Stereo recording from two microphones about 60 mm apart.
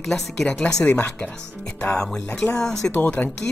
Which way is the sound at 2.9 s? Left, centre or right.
Left.